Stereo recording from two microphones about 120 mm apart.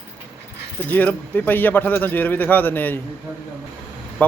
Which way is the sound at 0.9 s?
15° left (ahead or behind).